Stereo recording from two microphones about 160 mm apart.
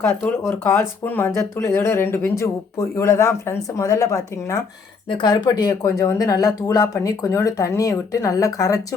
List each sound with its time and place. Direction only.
0.0 s speech: 10° left (ahead or behind)